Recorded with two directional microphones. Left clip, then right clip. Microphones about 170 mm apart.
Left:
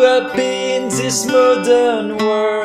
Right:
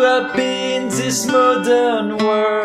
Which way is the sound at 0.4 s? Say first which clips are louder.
Left 2 dB; 25° left (ahead or behind).